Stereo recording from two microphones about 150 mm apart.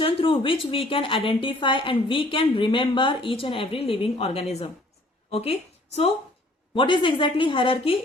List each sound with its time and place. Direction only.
0.0 s a woman's voice: 35° left (ahead or behind)
6.7 s a woman's voice: 35° left (ahead or behind)